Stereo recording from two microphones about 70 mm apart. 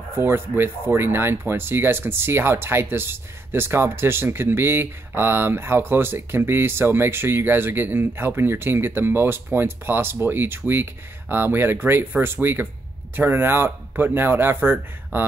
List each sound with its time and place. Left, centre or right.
0.1 s speech: right